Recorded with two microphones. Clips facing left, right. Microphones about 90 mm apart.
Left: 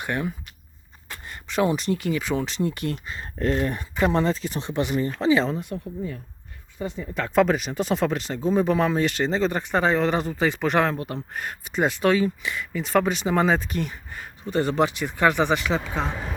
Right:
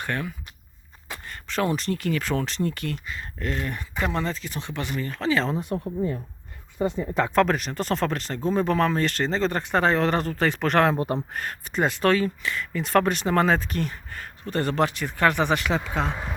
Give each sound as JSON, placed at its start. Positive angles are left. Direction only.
{"t": 0.0, "sound": "speech", "side_deg": 15}
{"t": 2.6, "sound": "speech", "side_deg": 20}
{"t": 5.5, "sound": "speech", "side_deg": -35}
{"t": 7.3, "sound": "speech", "side_deg": 0}
{"t": 10.9, "sound": "speech", "side_deg": -30}
{"t": 11.3, "sound": "speech", "side_deg": 5}